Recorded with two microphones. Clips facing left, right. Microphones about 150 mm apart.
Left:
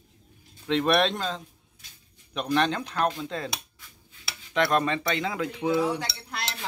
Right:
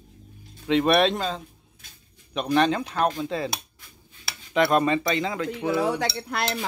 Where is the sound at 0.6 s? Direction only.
5° right (ahead or behind).